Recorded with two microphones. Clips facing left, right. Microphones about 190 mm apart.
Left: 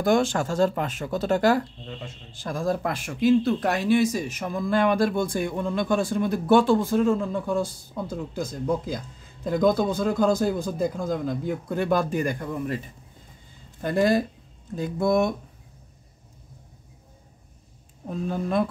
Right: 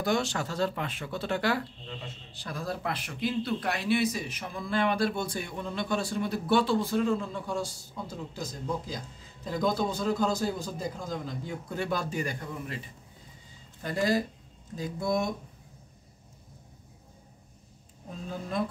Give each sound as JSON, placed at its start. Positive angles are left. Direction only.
{"t": 0.0, "sound": "speech", "side_deg": 50}
{"t": 18.0, "sound": "speech", "side_deg": 65}